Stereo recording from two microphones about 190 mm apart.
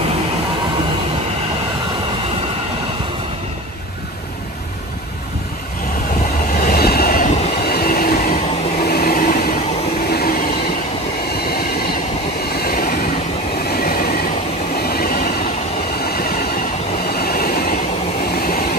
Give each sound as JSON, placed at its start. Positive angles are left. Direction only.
{"t": 6.5, "sound": "train", "side_deg": 50}
{"t": 8.8, "sound": "a sound", "side_deg": 55}
{"t": 10.0, "sound": "train", "side_deg": 55}
{"t": 11.3, "sound": "train", "side_deg": 55}
{"t": 18.3, "sound": "vehicle", "side_deg": 55}